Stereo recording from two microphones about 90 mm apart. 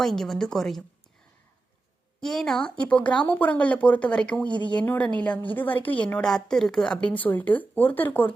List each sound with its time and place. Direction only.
0.0 s a woman's voice: 5° left (ahead or behind)
2.2 s speech: 5° left (ahead or behind)
6.2 s speech: 5° left (ahead or behind)